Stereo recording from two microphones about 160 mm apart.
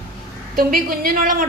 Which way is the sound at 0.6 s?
65° right (ahead or behind).